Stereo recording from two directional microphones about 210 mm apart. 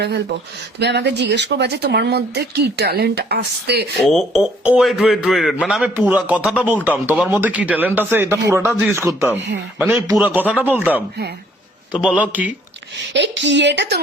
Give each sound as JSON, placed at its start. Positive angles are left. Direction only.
{"t": 0.0, "sound": "speech", "side_deg": -50}
{"t": 4.0, "sound": "speech", "side_deg": 0}
{"t": 12.0, "sound": "speech", "side_deg": -5}
{"t": 13.1, "sound": "a woman's voice", "side_deg": -55}